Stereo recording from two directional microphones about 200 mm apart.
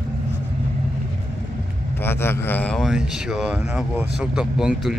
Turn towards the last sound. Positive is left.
turn(degrees=0)  # may be behind; listen again after turning